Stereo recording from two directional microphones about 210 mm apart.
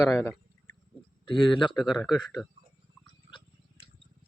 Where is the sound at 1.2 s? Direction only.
25° left (ahead or behind).